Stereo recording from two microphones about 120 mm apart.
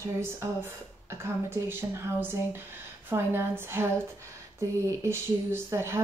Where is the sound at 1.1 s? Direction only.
20° right (ahead or behind).